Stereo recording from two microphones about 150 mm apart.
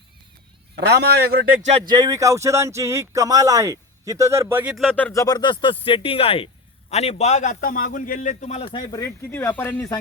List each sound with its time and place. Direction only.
0.8 s a man's voice: 90° right
1.8 s speech: 30° right (ahead or behind); by 4.8 s 10° right (ahead or behind)
4.8 s speech: 10° left (ahead or behind)
5.1 s a man's voice: 25° left (ahead or behind); by 8.7 s 50° left (ahead or behind)
8.7 s speech: 30° left (ahead or behind)
9.3 s speech: 15° left (ahead or behind)